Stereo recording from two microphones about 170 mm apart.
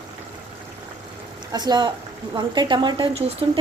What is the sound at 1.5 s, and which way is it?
Speech, 25° right (ahead or behind).